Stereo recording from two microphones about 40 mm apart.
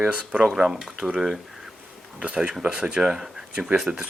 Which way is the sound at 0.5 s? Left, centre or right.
Centre.